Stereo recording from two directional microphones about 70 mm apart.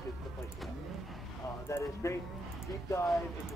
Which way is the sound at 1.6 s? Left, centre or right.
Left.